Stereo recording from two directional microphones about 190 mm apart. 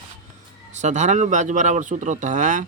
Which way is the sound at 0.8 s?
35° right (ahead or behind).